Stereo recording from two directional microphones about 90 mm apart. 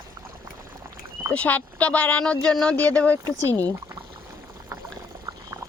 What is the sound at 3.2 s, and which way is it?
Speech, 40° right (ahead or behind).